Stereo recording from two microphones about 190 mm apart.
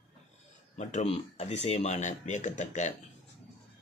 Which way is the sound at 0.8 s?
35° left (ahead or behind).